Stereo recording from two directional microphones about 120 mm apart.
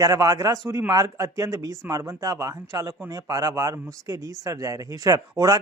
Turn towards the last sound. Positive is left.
turn(degrees=-30)  # may be behind; listen again after turning